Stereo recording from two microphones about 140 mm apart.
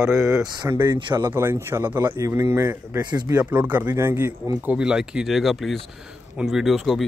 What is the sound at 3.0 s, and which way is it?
Speech, 30° right (ahead or behind).